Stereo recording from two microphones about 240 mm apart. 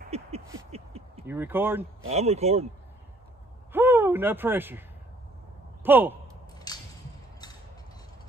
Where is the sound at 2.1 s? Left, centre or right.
Right.